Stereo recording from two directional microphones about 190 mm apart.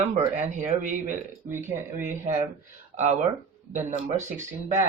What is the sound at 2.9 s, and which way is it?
Speech, 35° right (ahead or behind).